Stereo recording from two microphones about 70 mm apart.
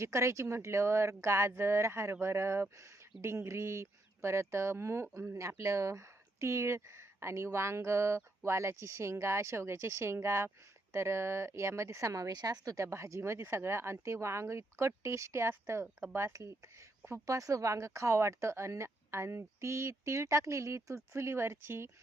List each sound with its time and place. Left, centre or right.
0.0 s speech: right
5.4 s speech: right
12.3 s speech: right